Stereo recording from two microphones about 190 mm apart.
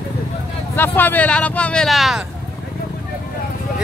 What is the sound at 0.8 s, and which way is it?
Speech, 10° left (ahead or behind).